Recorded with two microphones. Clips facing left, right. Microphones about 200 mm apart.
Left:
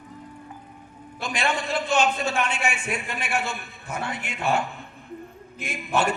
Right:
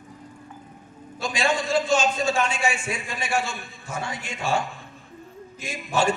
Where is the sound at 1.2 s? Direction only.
60° left (ahead or behind).